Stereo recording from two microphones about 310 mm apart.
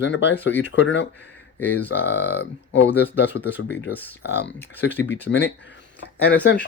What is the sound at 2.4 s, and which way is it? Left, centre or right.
Speech, left.